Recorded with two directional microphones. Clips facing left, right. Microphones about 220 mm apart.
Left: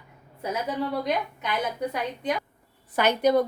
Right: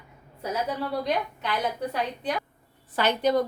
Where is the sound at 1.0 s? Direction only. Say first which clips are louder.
Even; 15° left (ahead or behind).